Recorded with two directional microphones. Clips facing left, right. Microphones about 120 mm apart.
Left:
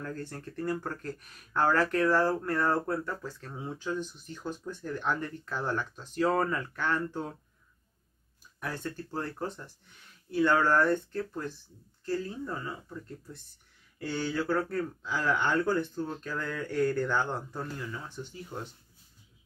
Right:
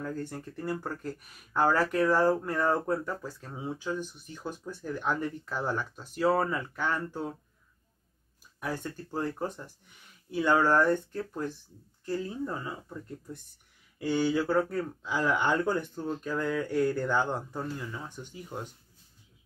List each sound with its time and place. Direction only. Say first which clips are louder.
0.0 s speech: right 3 dB; 10° right (ahead or behind)
8.5 s speech: right 1 dB; 10° right (ahead or behind)
13.9 s speech: right 5 dB; 10° right (ahead or behind)